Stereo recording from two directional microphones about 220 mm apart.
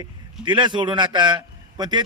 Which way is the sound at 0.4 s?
20° right (ahead or behind).